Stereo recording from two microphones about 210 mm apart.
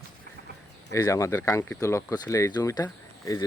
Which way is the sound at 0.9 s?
15° left (ahead or behind).